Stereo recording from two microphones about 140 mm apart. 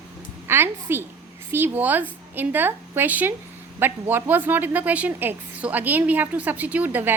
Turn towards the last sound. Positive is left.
turn(degrees=-15)  # may be behind; listen again after turning